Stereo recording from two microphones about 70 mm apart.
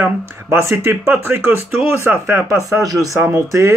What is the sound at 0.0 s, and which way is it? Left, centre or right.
Speech, right.